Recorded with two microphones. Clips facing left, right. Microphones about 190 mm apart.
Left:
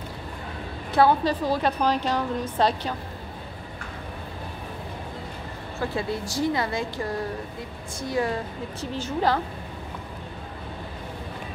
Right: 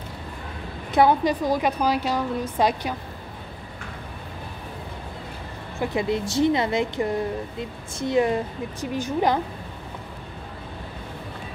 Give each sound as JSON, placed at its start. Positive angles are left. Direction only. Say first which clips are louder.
{"t": 0.9, "sound": "a woman's voice", "louder": "right 1 dB", "side_deg": -15}
{"t": 5.8, "sound": "a woman's voice", "louder": "right 4 dB", "side_deg": -20}